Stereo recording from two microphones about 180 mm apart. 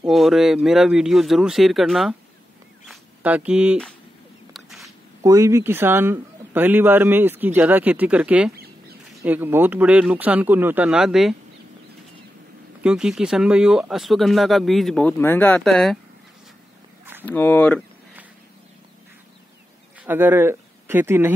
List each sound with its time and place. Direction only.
0.0 s speech: centre (ahead or behind)
2.9 s a sound: 5° right (ahead or behind)
5.2 s speech: 15° right (ahead or behind)
12.8 s speech: 5° right (ahead or behind)
17.2 s speech: 10° left (ahead or behind)
20.0 s speech: 10° right (ahead or behind)